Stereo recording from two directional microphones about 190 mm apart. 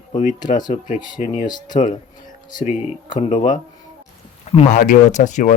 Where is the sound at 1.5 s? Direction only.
20° left (ahead or behind).